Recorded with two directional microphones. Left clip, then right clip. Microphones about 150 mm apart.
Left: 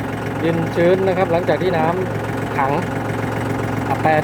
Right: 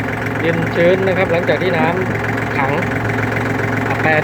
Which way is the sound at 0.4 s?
15° left (ahead or behind).